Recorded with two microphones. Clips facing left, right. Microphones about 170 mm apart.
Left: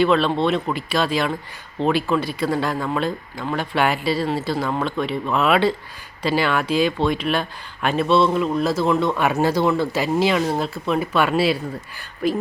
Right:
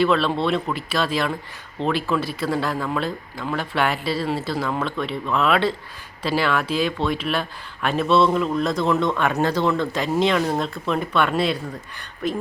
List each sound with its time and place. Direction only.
0.0 s speech: centre (ahead or behind)